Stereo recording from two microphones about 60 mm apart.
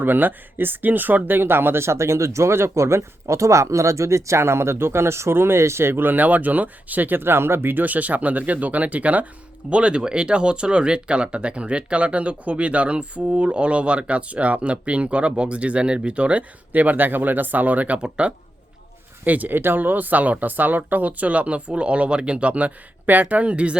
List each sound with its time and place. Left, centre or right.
0.0 s speech: right